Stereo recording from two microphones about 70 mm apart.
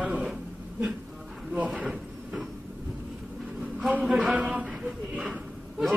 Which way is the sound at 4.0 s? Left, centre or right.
Centre.